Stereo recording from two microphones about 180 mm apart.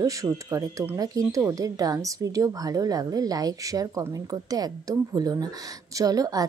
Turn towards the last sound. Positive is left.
turn(degrees=-20)  # may be behind; listen again after turning